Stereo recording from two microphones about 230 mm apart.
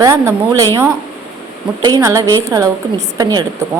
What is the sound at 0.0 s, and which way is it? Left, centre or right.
A woman's voice, centre.